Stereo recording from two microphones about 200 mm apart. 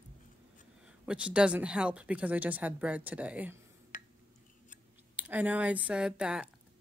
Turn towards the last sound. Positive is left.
turn(degrees=-5)  # may be behind; listen again after turning